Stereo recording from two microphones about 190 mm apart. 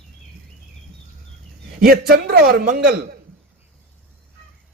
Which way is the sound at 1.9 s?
55° right (ahead or behind).